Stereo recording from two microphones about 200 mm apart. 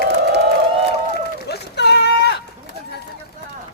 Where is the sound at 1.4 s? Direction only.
55° left (ahead or behind).